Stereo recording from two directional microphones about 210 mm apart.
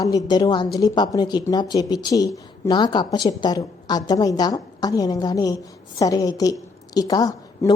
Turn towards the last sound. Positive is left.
turn(degrees=20)  # may be behind; listen again after turning